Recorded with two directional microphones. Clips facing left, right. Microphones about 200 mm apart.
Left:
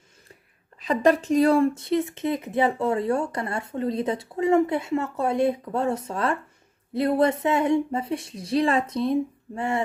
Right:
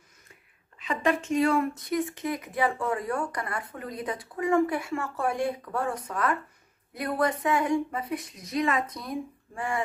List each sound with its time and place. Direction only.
0.7 s speech: 35° left (ahead or behind)